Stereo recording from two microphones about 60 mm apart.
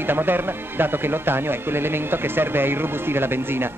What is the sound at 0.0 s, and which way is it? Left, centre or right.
Speech, right.